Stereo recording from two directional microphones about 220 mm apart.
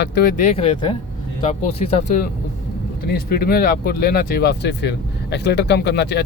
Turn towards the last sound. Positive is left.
turn(degrees=50)  # may be behind; listen again after turning